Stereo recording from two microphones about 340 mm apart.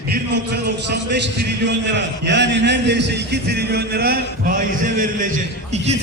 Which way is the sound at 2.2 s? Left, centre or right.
Right.